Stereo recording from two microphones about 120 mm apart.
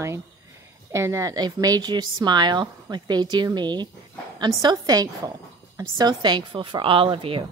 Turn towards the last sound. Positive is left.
turn(degrees=-50)  # may be behind; listen again after turning